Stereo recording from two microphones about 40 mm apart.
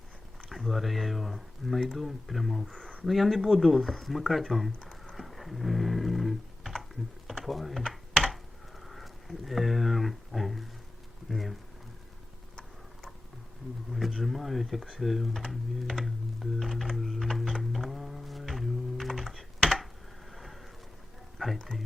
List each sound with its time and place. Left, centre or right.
0.5 s speech: centre
8.1 s computer keyboard: centre
8.8 s speech: centre
14.1 s speech: centre
15.4 s typing: centre
16.0 s a sound: centre